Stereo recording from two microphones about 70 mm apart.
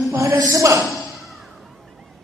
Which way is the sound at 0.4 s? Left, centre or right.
Right.